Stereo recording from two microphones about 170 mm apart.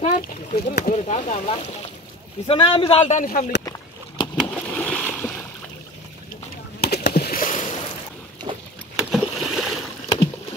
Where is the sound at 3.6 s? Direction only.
20° left (ahead or behind).